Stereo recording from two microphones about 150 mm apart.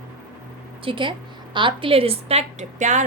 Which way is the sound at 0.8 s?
35° right (ahead or behind).